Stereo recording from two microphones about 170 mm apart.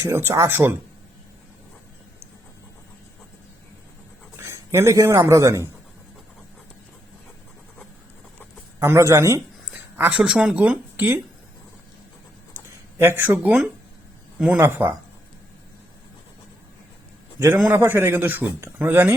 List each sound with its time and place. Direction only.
0.0 s speech: 15° right (ahead or behind)
4.4 s a man's voice: 15° right (ahead or behind)
8.8 s speech: 15° right (ahead or behind)
13.0 s speech: 10° right (ahead or behind)
17.7 s speech: 10° right (ahead or behind)